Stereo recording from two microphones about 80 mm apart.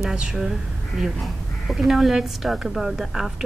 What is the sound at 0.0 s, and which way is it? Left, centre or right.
A woman's voice, centre.